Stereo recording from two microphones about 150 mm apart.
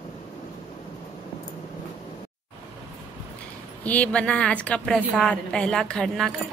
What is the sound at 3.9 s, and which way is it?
A woman's voice, 10° left (ahead or behind).